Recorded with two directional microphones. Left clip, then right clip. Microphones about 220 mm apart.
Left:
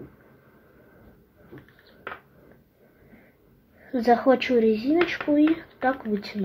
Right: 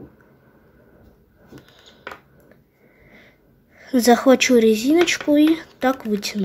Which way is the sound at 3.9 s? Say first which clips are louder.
Right 5 dB; 25° right (ahead or behind).